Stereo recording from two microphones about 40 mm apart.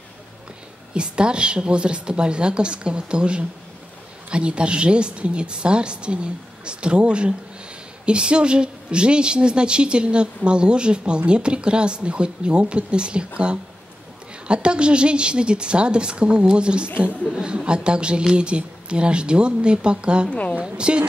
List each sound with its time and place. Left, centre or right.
0.9 s a woman's voice: right
20.2 s a woman's voice: left
20.6 s a woman's voice: right